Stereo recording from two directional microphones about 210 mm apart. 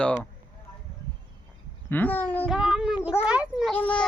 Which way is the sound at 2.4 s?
5° right (ahead or behind).